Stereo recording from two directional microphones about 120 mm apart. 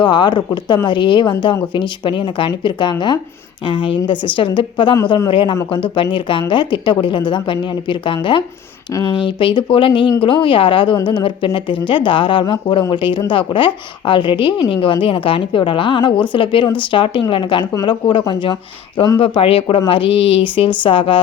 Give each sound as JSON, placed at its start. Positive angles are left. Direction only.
{"t": 0.0, "sound": "a woman's voice", "side_deg": 40}